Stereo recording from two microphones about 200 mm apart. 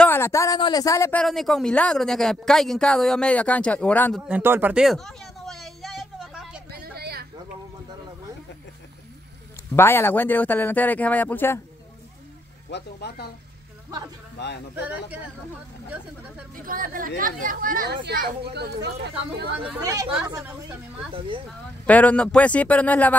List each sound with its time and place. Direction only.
0.0 s speech: 10° left (ahead or behind)
1.2 s a woman's voice: centre (ahead or behind)
4.3 s a sound: 10° right (ahead or behind)
6.7 s vehicle: 50° right (ahead or behind)
9.8 s a man's voice: 10° left (ahead or behind)
12.6 s speech: 55° left (ahead or behind)
16.5 s a woman's voice: 45° right (ahead or behind)
19.8 s speech: 15° right (ahead or behind)
20.1 s a woman's voice: 5° right (ahead or behind)
21.8 s a man's voice: 5° left (ahead or behind)